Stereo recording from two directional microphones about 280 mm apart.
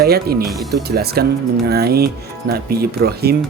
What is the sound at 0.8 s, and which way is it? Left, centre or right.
Speech, right.